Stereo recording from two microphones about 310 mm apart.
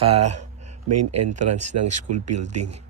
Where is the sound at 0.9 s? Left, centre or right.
Right.